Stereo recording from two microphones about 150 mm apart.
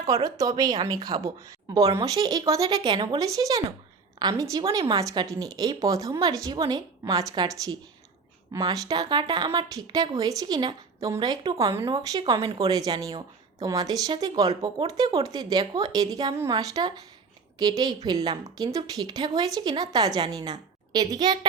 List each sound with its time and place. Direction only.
0.1 s a woman's voice: 25° right (ahead or behind)